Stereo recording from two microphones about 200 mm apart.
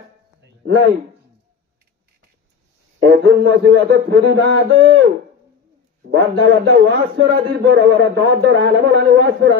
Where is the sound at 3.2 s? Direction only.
60° right (ahead or behind).